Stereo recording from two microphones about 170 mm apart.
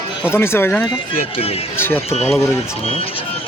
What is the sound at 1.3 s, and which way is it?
Speech, 35° left (ahead or behind).